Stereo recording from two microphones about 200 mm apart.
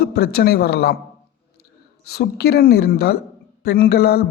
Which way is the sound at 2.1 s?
55° left (ahead or behind).